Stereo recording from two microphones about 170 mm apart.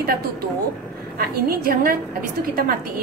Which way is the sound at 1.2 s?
60° right (ahead or behind).